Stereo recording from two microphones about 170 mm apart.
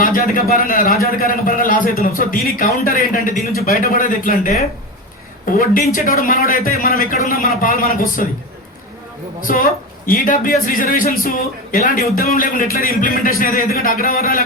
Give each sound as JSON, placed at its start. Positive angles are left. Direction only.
{"t": 0.0, "sound": "a man's voice", "side_deg": 55}
{"t": 9.5, "sound": "a woman's voice", "side_deg": 50}